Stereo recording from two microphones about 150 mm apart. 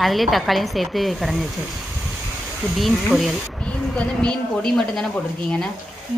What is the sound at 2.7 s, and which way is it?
Speech, centre (ahead or behind).